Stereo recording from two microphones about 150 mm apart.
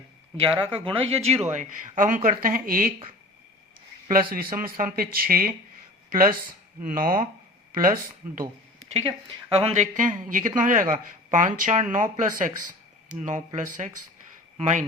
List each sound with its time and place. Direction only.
0.3 s speech: 35° right (ahead or behind)
1.5 s speech: 60° right (ahead or behind)
4.1 s speech: 75° right (ahead or behind)
8.9 s speech: 40° right (ahead or behind)